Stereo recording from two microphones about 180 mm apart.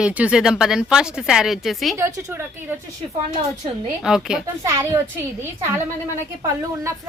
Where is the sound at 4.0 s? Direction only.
5° right (ahead or behind).